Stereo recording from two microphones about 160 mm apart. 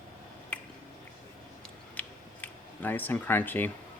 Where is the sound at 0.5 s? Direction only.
10° left (ahead or behind).